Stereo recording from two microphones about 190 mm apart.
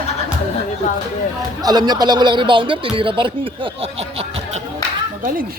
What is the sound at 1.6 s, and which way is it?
A man's voice, 20° right (ahead or behind).